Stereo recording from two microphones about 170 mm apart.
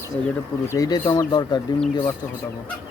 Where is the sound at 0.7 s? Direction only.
20° left (ahead or behind).